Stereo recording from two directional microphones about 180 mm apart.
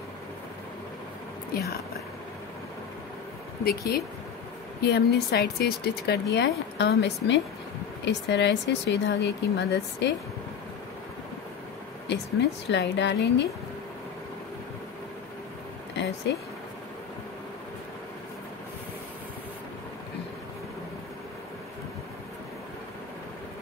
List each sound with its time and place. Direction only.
3.6 s a woman's voice: 60° left (ahead or behind)
12.1 s a woman's voice: 75° left (ahead or behind)